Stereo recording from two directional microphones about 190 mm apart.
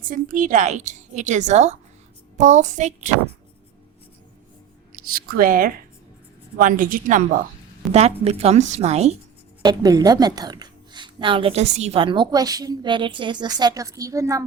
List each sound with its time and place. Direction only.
0.0 s a woman's voice: 45° right (ahead or behind)
4.9 s a woman's voice: 50° right (ahead or behind)
7.8 s a woman's voice: centre (ahead or behind)
8.2 s a woman's voice: 35° right (ahead or behind)
9.6 s a woman's voice: 20° right (ahead or behind)